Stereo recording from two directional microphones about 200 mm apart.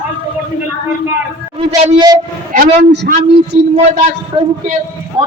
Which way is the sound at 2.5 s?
45° right (ahead or behind).